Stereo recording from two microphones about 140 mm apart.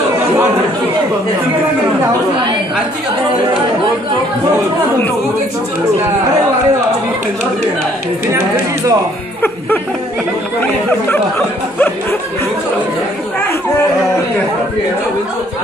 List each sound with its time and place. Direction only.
8.3 s speech: 20° right (ahead or behind)
10.9 s speech: 15° left (ahead or behind)